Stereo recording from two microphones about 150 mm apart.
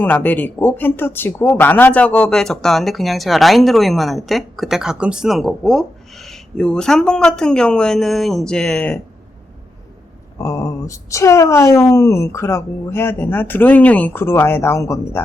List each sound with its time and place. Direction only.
0.0 s speech: 10° left (ahead or behind)
10.3 s speech: 20° left (ahead or behind)